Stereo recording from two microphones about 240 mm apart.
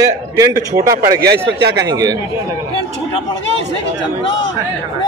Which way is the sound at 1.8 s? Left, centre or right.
Centre.